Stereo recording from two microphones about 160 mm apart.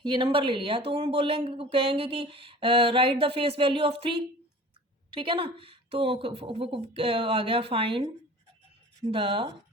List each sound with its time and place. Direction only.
0.0 s speech: 30° right (ahead or behind)
5.1 s speech: 30° right (ahead or behind)